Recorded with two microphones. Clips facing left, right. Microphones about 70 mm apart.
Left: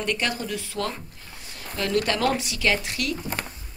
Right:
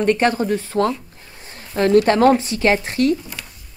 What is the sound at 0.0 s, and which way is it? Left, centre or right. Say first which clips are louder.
Speech: right 10 dB; right.